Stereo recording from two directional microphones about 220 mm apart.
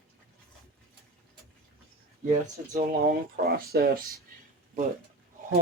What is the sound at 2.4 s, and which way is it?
Speech, 35° right (ahead or behind).